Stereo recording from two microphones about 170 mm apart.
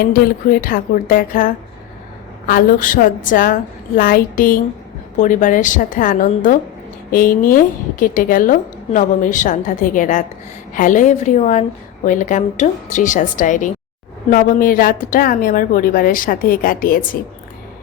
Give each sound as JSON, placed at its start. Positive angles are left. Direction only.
{"t": 0.1, "sound": "a woman's voice", "side_deg": 55}